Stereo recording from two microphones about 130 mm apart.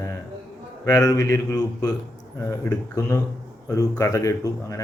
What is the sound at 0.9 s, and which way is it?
A man's voice, 25° left (ahead or behind).